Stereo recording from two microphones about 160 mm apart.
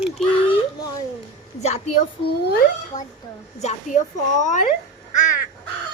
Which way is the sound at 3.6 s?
45° left (ahead or behind).